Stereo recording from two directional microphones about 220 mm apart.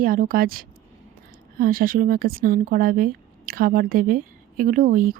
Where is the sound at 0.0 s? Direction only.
40° right (ahead or behind).